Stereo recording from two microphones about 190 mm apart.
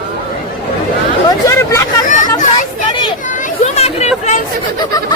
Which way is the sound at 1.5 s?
15° left (ahead or behind).